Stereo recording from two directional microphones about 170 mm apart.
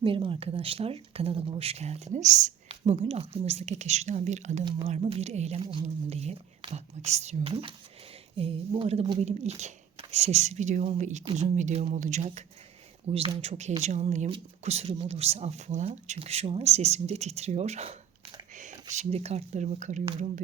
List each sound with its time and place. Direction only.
0.0 s speech: 30° right (ahead or behind)